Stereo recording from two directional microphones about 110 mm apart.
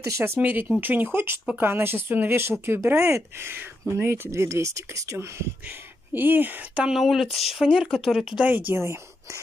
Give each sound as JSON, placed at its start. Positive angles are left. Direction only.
{"t": 0.0, "sound": "speech", "side_deg": -25}
{"t": 6.1, "sound": "speech", "side_deg": -20}
{"t": 8.5, "sound": "speech", "side_deg": -15}